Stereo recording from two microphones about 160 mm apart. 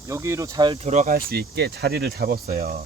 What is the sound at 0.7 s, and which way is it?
Speech, 40° right (ahead or behind).